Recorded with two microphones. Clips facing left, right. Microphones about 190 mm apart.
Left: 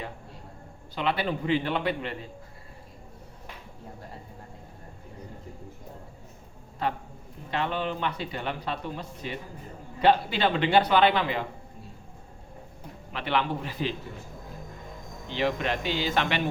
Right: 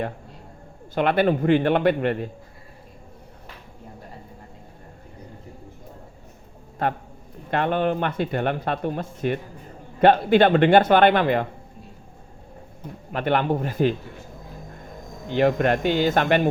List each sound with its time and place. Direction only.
0.9 s speech: 55° right (ahead or behind)
6.8 s a man's voice: 50° right (ahead or behind)
13.1 s a man's voice: 50° right (ahead or behind)
15.3 s a man's voice: 50° right (ahead or behind)